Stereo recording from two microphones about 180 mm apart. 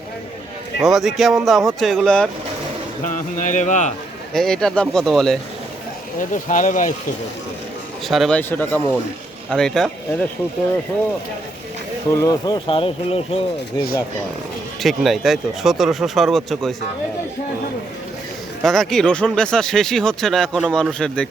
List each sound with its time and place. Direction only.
0.8 s speech: centre (ahead or behind)
3.0 s speech: 45° left (ahead or behind)
4.4 s speech: 5° left (ahead or behind)
6.1 s speech: 45° left (ahead or behind)
8.0 s speech: centre (ahead or behind)
12.1 s speech: 20° left (ahead or behind)
14.8 s speech: centre (ahead or behind)
18.6 s speech: centre (ahead or behind)